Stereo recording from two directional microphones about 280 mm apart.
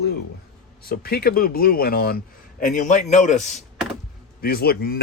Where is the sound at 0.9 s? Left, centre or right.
Left.